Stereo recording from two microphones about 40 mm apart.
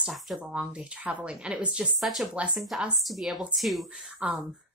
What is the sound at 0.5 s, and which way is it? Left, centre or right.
A woman's voice, right.